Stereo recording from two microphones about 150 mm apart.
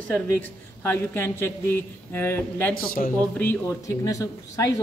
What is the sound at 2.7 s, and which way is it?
Speech, 80° left.